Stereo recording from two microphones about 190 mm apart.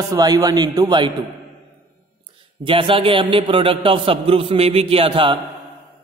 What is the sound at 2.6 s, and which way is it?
A man's voice, 25° right (ahead or behind).